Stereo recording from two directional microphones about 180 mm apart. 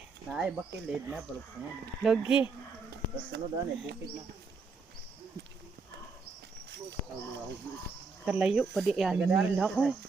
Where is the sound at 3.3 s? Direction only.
65° right (ahead or behind).